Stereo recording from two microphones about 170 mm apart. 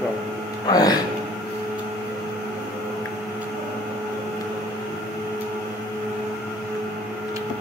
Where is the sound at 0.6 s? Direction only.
20° left (ahead or behind).